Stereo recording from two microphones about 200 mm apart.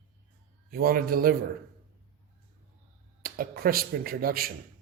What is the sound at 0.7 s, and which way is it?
Speech, 45° right (ahead or behind).